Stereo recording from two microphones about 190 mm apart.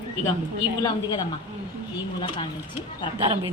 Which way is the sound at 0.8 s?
20° left (ahead or behind).